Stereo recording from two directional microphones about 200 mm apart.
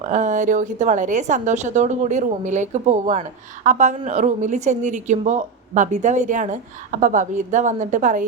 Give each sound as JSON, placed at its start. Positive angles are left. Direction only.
{"t": 0.1, "sound": "a woman's voice", "side_deg": -40}